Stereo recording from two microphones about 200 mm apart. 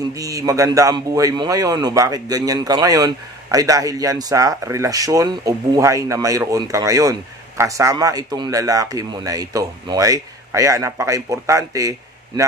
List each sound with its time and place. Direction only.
0.2 s a man's voice: 15° right (ahead or behind)